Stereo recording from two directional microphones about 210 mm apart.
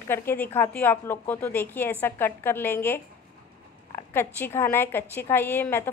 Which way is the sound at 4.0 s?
10° left (ahead or behind).